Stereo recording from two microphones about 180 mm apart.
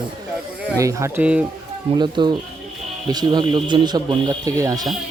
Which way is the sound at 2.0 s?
25° right (ahead or behind).